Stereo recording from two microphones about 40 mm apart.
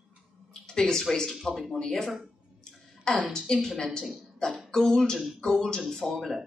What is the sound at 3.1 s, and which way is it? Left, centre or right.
Speech, centre.